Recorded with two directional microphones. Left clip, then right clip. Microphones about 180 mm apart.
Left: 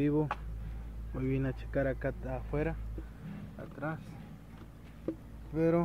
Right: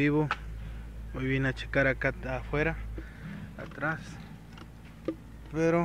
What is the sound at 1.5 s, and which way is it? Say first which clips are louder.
Speech: right 6 dB; 5° right (ahead or behind).